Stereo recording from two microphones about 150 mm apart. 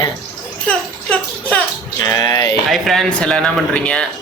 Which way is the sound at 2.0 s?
25° left (ahead or behind).